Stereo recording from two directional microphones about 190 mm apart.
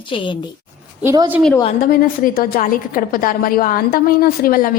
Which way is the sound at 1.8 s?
50° left (ahead or behind).